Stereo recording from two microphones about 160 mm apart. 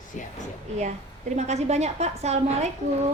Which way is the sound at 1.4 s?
45° right (ahead or behind).